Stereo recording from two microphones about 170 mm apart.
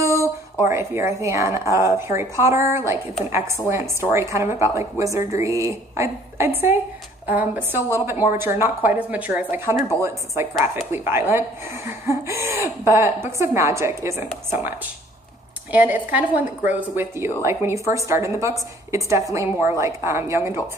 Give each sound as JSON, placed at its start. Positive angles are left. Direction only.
{"t": 0.0, "sound": "a sound", "side_deg": -20}
{"t": 0.7, "sound": "speech", "side_deg": -15}
{"t": 15.7, "sound": "speech", "side_deg": -10}